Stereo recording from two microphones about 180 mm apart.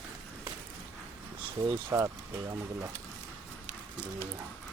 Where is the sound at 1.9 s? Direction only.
15° right (ahead or behind).